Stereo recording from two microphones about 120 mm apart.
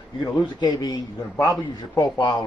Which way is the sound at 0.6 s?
30° left (ahead or behind).